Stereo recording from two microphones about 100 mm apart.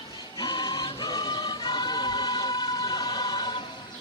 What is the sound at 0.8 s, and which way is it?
Choir, 45° left (ahead or behind).